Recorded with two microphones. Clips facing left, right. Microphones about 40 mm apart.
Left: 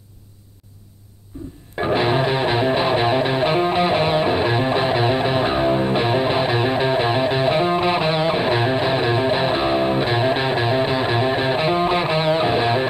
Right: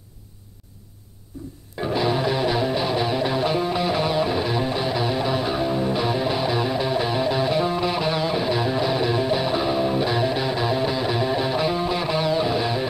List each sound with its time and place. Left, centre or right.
1.3 s music: left